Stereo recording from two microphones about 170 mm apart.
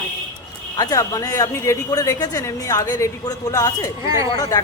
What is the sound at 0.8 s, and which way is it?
Speech, 20° left (ahead or behind).